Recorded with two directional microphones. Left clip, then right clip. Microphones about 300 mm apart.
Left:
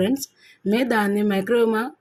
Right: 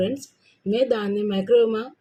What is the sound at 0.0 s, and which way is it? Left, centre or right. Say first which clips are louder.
Speech: left 2 dB; left.